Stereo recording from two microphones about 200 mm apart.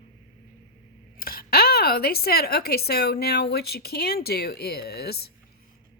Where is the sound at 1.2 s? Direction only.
50° left (ahead or behind).